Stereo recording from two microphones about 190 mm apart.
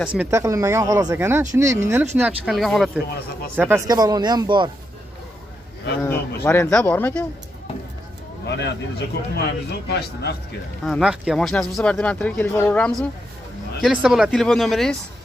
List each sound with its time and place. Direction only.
0.2 s speech: 15° right (ahead or behind); by 3.0 s centre (ahead or behind)
3.5 s speech: 10° right (ahead or behind)
6.0 s speech: 10° left (ahead or behind)
8.5 s a man's voice: 65° left (ahead or behind)
10.9 s speech: centre (ahead or behind)